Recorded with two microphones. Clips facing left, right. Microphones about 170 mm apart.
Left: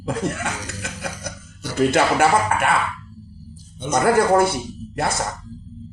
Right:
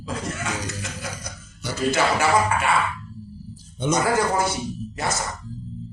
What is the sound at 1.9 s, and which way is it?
Speech, 55° left (ahead or behind).